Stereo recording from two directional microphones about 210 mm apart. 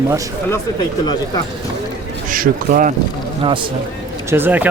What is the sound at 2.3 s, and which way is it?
Speech, 40° right (ahead or behind).